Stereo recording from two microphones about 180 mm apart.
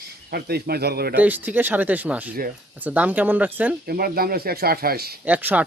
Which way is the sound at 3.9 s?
55° right (ahead or behind).